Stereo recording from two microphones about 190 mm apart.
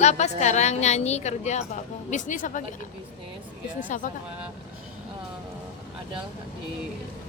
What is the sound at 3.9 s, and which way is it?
Speech, 40° left (ahead or behind).